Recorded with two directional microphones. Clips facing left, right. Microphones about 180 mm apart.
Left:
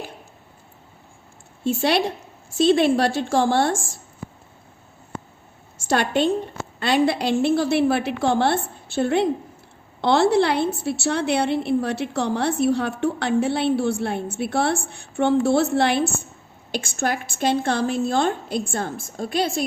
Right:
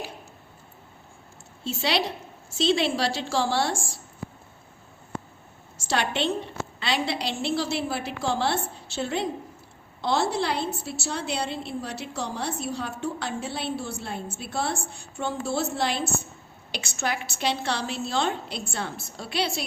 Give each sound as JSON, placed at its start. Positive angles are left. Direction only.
{"t": 1.6, "sound": "a woman's voice", "side_deg": 55}
{"t": 5.7, "sound": "a woman's voice", "side_deg": 50}